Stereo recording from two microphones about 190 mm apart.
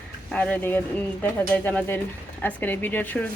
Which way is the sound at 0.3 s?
5° left (ahead or behind).